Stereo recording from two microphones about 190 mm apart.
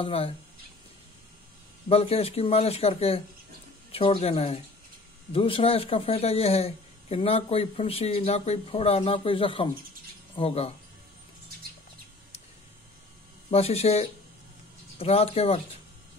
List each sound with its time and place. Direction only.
0.0 s speech: 30° left (ahead or behind)
1.9 s speech: 30° left (ahead or behind)
13.5 s speech: 30° left (ahead or behind)